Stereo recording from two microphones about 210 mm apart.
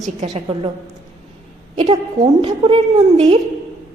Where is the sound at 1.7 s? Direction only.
25° right (ahead or behind).